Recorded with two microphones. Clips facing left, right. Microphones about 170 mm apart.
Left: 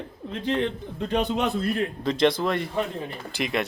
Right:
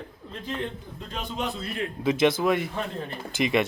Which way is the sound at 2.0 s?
5° right (ahead or behind).